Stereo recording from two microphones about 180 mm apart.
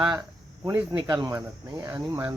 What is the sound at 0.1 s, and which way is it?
Cricket, 20° right (ahead or behind).